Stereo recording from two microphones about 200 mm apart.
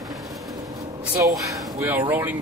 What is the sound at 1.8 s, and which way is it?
Speech, 10° right (ahead or behind).